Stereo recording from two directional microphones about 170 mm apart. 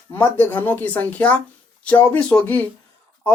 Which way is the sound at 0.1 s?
15° left (ahead or behind).